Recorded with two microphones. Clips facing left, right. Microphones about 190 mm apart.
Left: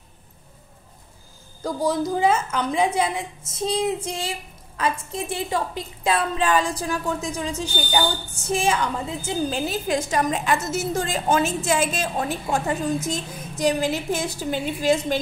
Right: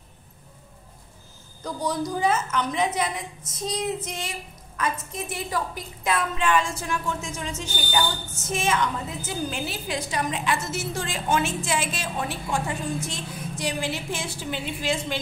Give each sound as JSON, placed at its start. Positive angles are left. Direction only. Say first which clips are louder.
{"t": 1.8, "sound": "a woman's voice", "louder": "left 4 dB", "side_deg": 25}
{"t": 9.7, "sound": "a woman's voice", "louder": "left 7 dB", "side_deg": 45}